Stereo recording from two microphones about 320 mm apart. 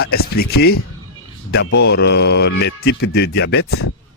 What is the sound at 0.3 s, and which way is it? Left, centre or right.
A man's voice, left.